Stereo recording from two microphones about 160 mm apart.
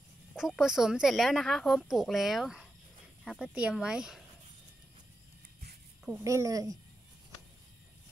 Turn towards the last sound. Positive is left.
turn(degrees=-20)  # may be behind; listen again after turning